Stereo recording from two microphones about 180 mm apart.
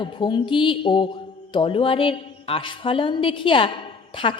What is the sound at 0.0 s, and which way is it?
A man's voice, 25° left (ahead or behind).